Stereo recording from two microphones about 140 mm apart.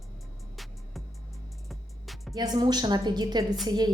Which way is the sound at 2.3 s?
30° right (ahead or behind).